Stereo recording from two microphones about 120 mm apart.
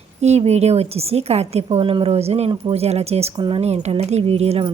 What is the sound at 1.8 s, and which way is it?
Speech, 45° right (ahead or behind).